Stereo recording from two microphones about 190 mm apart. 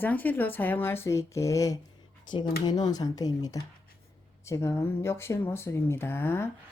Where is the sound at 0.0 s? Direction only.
10° left (ahead or behind).